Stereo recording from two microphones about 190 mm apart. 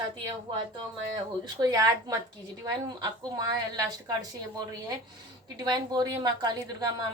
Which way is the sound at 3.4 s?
20° right (ahead or behind).